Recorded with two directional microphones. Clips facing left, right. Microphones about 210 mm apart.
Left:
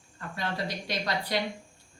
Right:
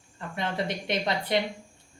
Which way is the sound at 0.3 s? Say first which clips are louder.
Right 3 dB; 25° right (ahead or behind).